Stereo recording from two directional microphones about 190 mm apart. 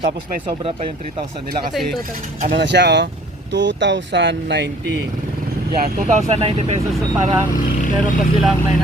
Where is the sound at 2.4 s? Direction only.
55° right (ahead or behind).